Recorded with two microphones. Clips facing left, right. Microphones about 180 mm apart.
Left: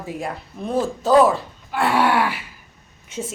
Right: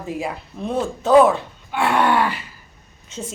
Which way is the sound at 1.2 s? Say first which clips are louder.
Right 3 dB; centre (ahead or behind).